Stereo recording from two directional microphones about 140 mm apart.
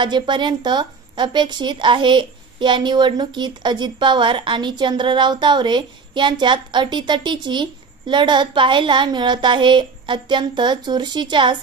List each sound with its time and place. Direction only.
0.0 s speech: 35° right (ahead or behind)